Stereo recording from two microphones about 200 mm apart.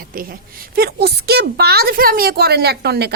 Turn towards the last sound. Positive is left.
turn(degrees=-55)  # may be behind; listen again after turning